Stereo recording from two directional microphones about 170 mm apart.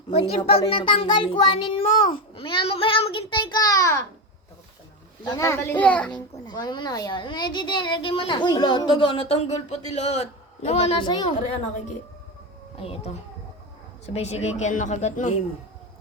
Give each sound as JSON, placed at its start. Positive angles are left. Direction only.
{"t": 0.1, "sound": "a woman's voice", "side_deg": 35}
{"t": 5.2, "sound": "speech", "side_deg": 15}
{"t": 6.4, "sound": "a woman's voice", "side_deg": 25}
{"t": 11.1, "sound": "a woman's voice", "side_deg": 25}
{"t": 12.7, "sound": "speech", "side_deg": 35}
{"t": 14.1, "sound": "speech", "side_deg": 40}